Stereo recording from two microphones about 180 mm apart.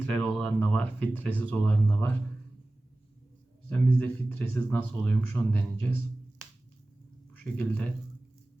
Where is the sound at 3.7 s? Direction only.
10° left (ahead or behind).